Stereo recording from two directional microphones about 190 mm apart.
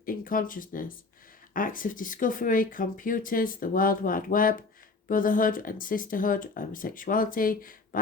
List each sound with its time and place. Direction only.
0.0 s speech: 45° left (ahead or behind)